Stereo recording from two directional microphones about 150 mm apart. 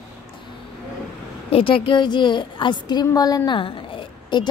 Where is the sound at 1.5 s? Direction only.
35° left (ahead or behind).